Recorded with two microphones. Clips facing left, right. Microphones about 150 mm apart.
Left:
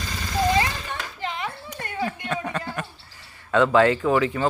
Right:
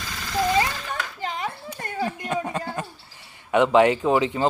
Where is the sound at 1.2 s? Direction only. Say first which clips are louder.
Left 1 dB; 40° right (ahead or behind).